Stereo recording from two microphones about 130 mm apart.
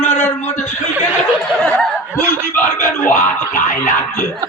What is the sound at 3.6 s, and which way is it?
Music, 70° left (ahead or behind).